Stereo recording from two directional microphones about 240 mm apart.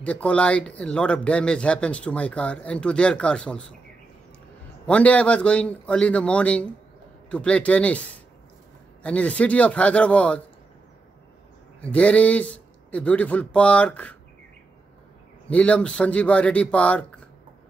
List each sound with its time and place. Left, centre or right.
0.0 s speech: centre
4.8 s speech: centre
11.8 s speech: centre
15.4 s speech: centre